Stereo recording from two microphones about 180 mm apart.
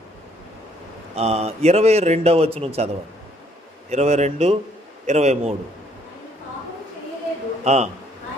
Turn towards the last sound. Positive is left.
turn(degrees=-40)  # may be behind; listen again after turning